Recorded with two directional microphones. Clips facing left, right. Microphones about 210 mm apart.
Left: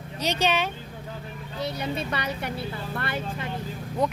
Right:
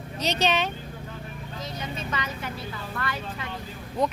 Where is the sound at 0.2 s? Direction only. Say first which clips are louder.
Even; 10° left (ahead or behind).